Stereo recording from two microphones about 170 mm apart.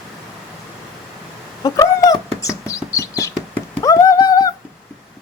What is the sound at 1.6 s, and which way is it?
Chicken, 20° left (ahead or behind).